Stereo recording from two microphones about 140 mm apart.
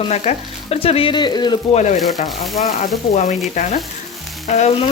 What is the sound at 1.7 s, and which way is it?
Sizzle, 60° left (ahead or behind).